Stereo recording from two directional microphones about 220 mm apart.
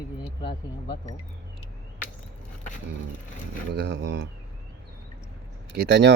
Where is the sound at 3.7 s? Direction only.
50° right (ahead or behind).